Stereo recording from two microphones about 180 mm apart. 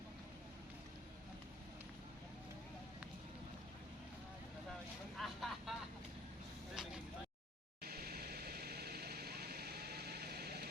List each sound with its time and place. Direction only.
5.1 s vehicle: centre (ahead or behind)
6.8 s vehicle: 5° right (ahead or behind)
7.9 s vehicle: 60° right (ahead or behind)